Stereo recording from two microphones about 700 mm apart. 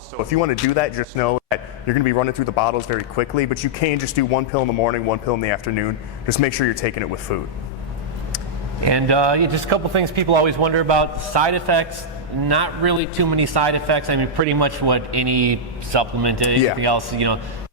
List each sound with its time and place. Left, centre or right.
0.3 s speech: left
8.8 s a man's voice: right